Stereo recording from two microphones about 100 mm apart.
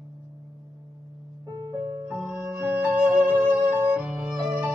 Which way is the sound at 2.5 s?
20° right (ahead or behind).